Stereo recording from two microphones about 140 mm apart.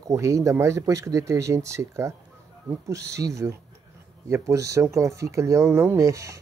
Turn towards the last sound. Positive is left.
turn(degrees=-20)  # may be behind; listen again after turning